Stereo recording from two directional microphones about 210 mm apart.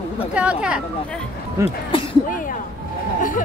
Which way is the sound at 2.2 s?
40° left (ahead or behind).